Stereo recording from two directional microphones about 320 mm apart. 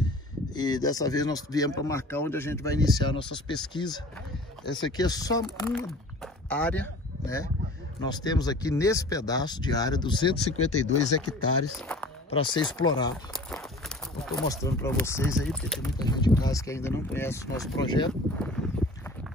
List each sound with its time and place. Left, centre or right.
0.6 s speech: centre
10.6 s speech: left
12.3 s speech: centre
13.3 s a sound: centre
15.3 s speech: centre